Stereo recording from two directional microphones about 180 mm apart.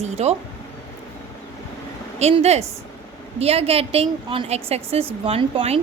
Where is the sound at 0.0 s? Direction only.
35° right (ahead or behind).